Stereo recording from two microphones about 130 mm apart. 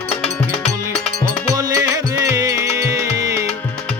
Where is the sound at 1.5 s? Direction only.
30° right (ahead or behind).